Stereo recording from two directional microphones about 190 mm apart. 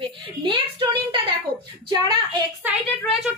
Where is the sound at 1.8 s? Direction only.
25° right (ahead or behind).